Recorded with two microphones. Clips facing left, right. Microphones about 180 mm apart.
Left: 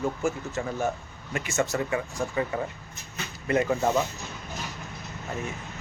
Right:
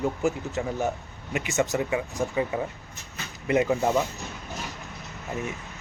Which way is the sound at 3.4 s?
15° right (ahead or behind).